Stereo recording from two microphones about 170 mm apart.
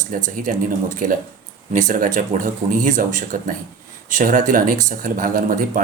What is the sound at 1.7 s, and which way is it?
Speech, 50° right (ahead or behind).